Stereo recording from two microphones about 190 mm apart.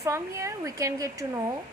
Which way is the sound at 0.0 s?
15° right (ahead or behind).